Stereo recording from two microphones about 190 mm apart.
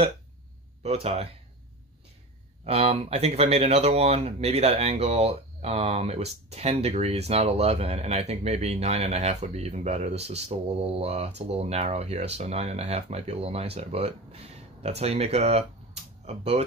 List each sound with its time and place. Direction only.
0.8 s speech: 30° right (ahead or behind)
2.6 s speech: 35° right (ahead or behind)